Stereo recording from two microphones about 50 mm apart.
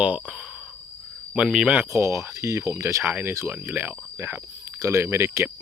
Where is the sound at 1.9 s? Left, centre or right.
Right.